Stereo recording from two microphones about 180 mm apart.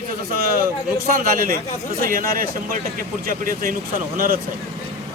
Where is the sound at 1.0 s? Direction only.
50° right (ahead or behind).